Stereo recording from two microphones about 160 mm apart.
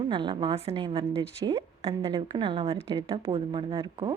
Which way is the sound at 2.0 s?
25° right (ahead or behind).